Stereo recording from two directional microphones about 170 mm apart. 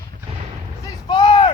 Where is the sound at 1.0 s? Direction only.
30° left (ahead or behind).